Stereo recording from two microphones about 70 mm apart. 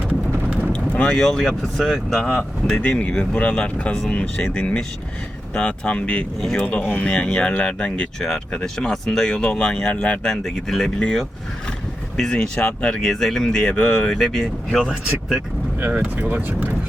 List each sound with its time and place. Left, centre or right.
0.1 s clip-clop: right
0.7 s speech: centre
10.2 s speech: centre
15.8 s speech: right